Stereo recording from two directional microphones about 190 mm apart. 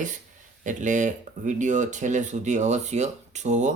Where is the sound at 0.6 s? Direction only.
40° right (ahead or behind).